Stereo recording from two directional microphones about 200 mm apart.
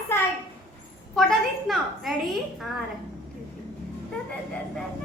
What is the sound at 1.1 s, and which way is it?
Speech, centre (ahead or behind).